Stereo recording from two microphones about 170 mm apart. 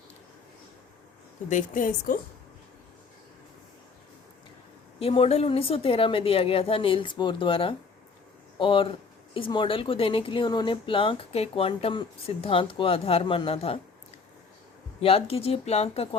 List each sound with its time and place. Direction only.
1.5 s a woman's voice: 50° left (ahead or behind)
4.9 s speech: 35° left (ahead or behind)
15.0 s speech: 35° left (ahead or behind)